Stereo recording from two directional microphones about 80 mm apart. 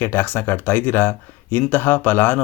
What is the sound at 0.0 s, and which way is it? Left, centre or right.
Speech, left.